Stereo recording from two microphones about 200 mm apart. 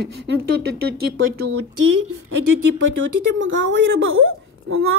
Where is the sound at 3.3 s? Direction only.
70° right (ahead or behind); by 4.9 s 90° right.